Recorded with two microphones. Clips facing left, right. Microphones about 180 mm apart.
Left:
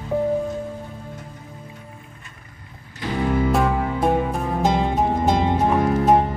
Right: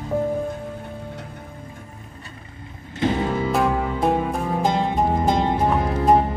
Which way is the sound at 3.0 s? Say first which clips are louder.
Right 6 dB; 25° right (ahead or behind).